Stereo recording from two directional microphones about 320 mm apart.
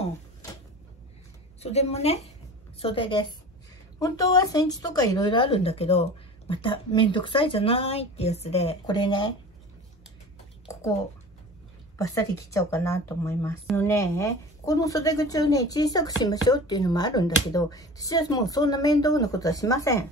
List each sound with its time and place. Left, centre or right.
1.6 s a woman's voice: centre
10.7 s a sound: centre
12.0 s speech: centre